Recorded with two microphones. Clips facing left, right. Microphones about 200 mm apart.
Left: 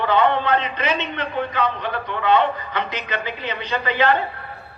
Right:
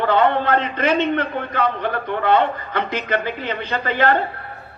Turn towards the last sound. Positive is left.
turn(degrees=-50)  # may be behind; listen again after turning